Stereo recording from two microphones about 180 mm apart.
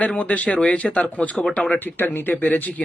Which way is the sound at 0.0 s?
5° left (ahead or behind).